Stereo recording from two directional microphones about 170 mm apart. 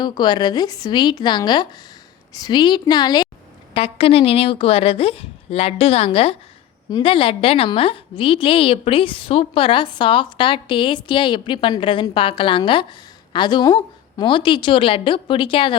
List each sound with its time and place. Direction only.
0.0 s a woman's voice: 25° left (ahead or behind)